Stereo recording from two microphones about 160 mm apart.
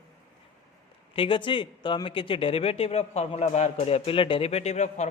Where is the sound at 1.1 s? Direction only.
35° left (ahead or behind).